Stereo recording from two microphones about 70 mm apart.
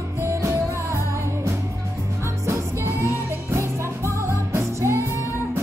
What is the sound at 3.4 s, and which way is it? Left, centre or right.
Music, right.